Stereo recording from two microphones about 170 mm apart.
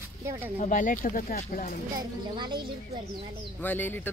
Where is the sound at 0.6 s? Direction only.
50° left (ahead or behind).